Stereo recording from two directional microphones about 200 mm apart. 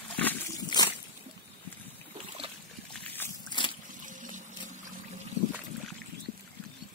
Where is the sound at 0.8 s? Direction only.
20° left (ahead or behind).